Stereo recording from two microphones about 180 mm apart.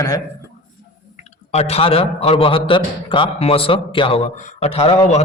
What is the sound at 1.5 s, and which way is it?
A man's voice, 35° left (ahead or behind).